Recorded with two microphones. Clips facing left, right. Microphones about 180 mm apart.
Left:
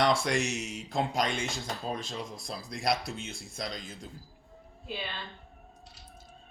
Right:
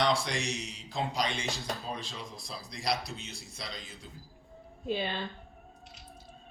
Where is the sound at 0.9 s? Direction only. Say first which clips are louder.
Left 3 dB; 50° left (ahead or behind).